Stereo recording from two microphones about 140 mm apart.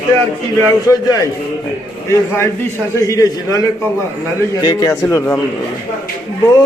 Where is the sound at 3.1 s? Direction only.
25° left (ahead or behind).